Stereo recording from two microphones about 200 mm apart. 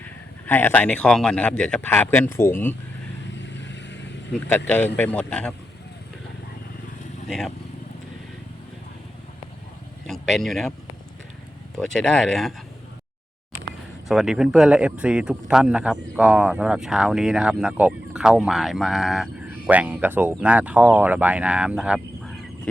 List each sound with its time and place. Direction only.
0.4 s speech: 10° left (ahead or behind)
3.3 s vehicle: 65° left (ahead or behind)
4.4 s speech: 10° left (ahead or behind)
7.3 s speech: centre (ahead or behind)
10.1 s speech: centre (ahead or behind)
11.8 s speech: centre (ahead or behind)
14.1 s speech: centre (ahead or behind)